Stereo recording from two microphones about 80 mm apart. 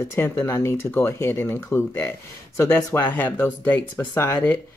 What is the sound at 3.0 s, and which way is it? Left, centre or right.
Speech, left.